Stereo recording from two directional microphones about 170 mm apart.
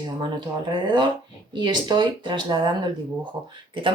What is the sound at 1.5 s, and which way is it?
A woman's voice, 25° right (ahead or behind).